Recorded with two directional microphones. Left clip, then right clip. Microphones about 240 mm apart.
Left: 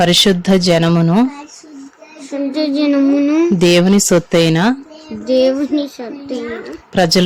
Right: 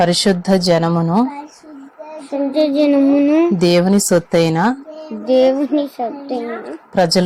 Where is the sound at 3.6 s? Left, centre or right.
Left.